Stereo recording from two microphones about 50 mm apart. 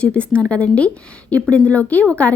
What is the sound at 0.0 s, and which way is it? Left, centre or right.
Speech, left.